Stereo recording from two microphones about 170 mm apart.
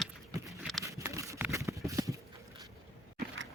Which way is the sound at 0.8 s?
20° right (ahead or behind).